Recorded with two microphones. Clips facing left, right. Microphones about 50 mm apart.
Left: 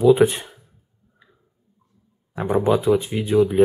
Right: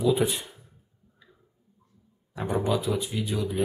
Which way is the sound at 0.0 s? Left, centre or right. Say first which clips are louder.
Left 9 dB; left.